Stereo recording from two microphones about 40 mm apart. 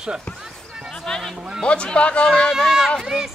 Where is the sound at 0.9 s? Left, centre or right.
Centre.